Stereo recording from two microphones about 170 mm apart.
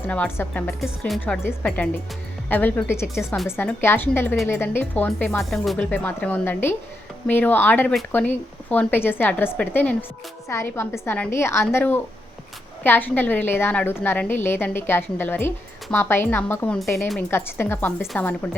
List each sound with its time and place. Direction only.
0.1 s a woman's voice: 10° left (ahead or behind)
0.8 s a woman's voice: centre (ahead or behind)
3.2 s speech: 5° right (ahead or behind)
3.6 s a woman's voice: 10° left (ahead or behind)